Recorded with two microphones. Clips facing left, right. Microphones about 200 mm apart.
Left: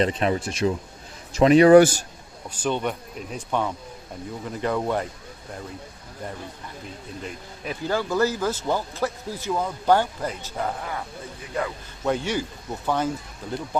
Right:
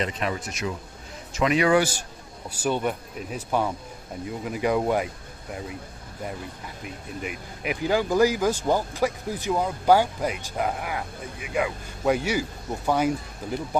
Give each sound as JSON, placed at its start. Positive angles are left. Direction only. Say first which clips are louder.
{"t": 0.0, "sound": "speech", "louder": "left 6 dB", "side_deg": 30}
{"t": 2.5, "sound": "speech", "louder": "even", "side_deg": -10}
{"t": 7.2, "sound": "speech", "louder": "right 3 dB", "side_deg": -15}